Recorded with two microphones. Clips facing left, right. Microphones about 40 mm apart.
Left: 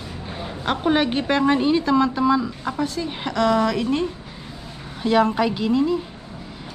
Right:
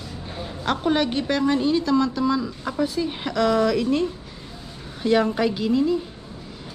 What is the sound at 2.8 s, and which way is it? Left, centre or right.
Speech, centre.